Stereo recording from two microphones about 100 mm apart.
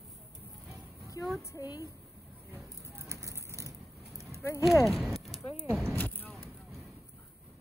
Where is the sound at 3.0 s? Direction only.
30° right (ahead or behind).